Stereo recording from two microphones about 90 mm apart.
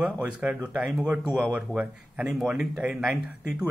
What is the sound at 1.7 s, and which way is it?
A man's voice, 5° right (ahead or behind).